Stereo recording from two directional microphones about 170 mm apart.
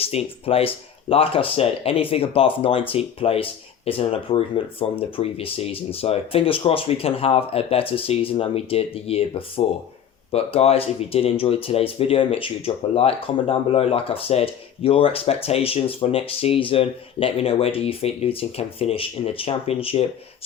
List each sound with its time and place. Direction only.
0.0 s speech: 35° left (ahead or behind)